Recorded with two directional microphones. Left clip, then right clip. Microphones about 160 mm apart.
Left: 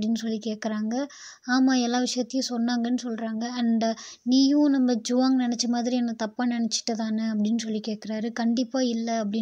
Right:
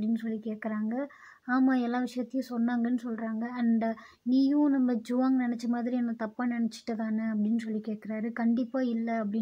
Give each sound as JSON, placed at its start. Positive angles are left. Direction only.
{"t": 0.7, "sound": "a woman's voice", "side_deg": 25}
{"t": 8.1, "sound": "a woman's voice", "side_deg": 30}
{"t": 8.5, "sound": "speech", "side_deg": 15}